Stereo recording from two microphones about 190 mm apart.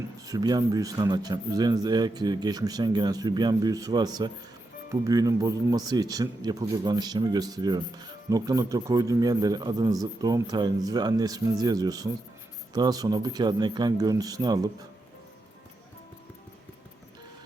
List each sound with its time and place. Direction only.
0.3 s a man's voice: 20° right (ahead or behind)